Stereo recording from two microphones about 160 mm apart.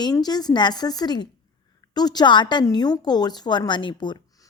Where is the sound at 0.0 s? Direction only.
25° left (ahead or behind).